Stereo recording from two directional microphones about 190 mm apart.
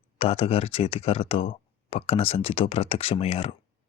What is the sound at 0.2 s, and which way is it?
Speech, 30° left (ahead or behind).